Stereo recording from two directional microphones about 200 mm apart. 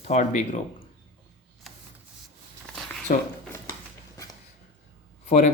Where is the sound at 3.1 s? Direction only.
40° left (ahead or behind).